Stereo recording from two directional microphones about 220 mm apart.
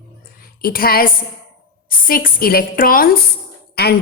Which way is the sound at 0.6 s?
40° left (ahead or behind).